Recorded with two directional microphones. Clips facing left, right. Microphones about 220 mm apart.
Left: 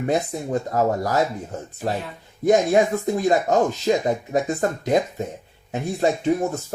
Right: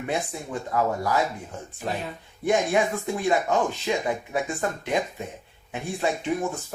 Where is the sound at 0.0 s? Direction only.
40° left (ahead or behind).